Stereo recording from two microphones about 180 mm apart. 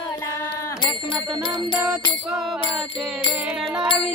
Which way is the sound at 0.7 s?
25° left (ahead or behind).